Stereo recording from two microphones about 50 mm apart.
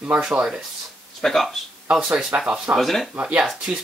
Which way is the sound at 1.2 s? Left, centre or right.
Centre.